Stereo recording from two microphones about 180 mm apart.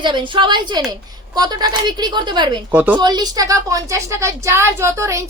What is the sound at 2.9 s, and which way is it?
A woman's voice, 20° right (ahead or behind).